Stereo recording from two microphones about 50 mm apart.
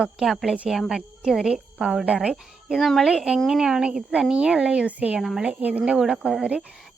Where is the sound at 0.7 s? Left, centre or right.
Centre.